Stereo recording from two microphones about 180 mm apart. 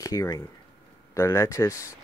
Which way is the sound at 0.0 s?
20° left (ahead or behind).